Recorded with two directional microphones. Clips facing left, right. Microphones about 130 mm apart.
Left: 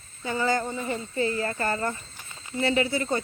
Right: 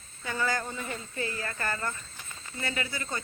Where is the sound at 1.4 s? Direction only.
30° left (ahead or behind).